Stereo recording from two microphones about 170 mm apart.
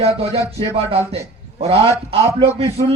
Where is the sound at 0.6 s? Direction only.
35° right (ahead or behind).